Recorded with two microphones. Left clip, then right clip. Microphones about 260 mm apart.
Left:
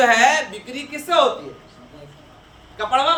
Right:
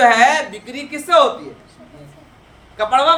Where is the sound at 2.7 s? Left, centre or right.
Centre.